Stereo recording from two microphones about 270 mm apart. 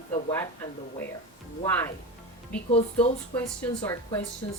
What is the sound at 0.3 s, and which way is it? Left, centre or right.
Speech, centre.